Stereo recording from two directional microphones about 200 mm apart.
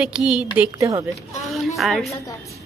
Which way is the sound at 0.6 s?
15° right (ahead or behind).